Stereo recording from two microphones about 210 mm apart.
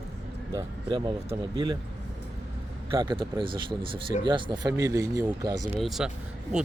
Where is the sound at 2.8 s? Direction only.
20° right (ahead or behind).